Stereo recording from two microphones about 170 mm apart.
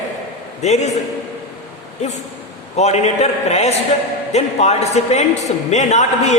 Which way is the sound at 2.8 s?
40° left (ahead or behind).